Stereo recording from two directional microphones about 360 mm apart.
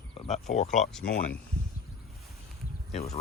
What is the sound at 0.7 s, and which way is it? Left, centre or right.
Speech, centre.